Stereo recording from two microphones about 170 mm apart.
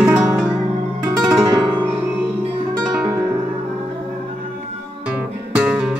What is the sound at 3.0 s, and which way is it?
Music, 20° right (ahead or behind).